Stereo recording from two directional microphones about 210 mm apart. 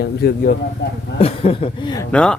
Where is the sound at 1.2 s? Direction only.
25° left (ahead or behind).